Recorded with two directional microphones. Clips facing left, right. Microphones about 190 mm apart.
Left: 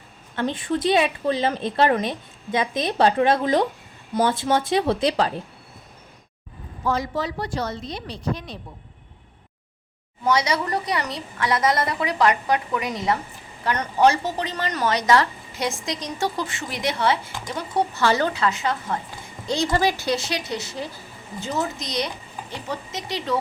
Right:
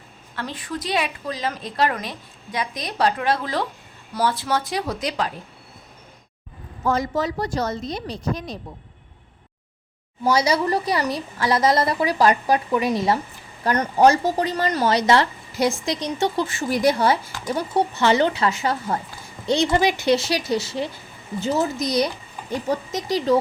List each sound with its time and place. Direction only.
0.3 s a woman's voice: 25° left (ahead or behind)
6.8 s a woman's voice: 45° right (ahead or behind)
10.2 s a woman's voice: 30° right (ahead or behind)
16.6 s a woman's voice: 35° right (ahead or behind)
17.9 s speech: 20° right (ahead or behind)
19.5 s a woman's voice: 20° right (ahead or behind); by 23.4 s 40° right (ahead or behind)